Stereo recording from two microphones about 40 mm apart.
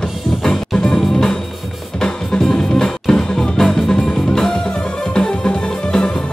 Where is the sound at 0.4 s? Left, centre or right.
Centre.